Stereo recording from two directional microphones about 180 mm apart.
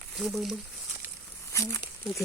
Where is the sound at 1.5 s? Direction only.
15° left (ahead or behind).